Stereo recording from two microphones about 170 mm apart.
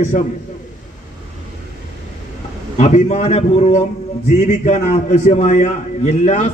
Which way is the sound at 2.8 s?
45° left (ahead or behind).